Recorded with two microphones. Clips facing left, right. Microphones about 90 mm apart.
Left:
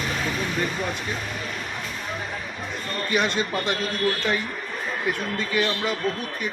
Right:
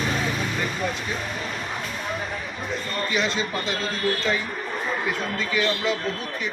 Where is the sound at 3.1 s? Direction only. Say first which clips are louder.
Left 3 dB; 55° left (ahead or behind).